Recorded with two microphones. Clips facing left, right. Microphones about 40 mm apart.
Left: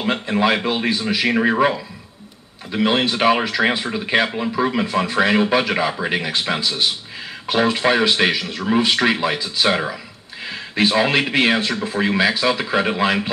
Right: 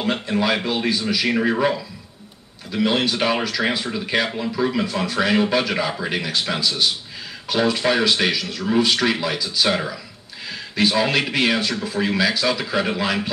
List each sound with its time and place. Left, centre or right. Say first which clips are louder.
0.0 s speech: left 3 dB; left